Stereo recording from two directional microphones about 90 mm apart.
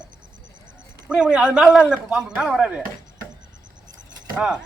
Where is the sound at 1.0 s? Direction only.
10° right (ahead or behind).